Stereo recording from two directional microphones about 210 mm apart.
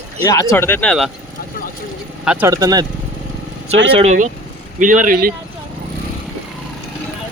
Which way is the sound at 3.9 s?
30° right (ahead or behind).